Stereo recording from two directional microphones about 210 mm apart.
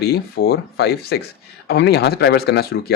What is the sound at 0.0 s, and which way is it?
Speech, 50° left (ahead or behind).